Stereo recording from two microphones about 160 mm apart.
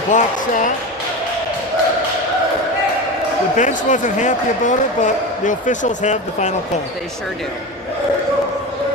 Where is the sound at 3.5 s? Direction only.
50° left (ahead or behind).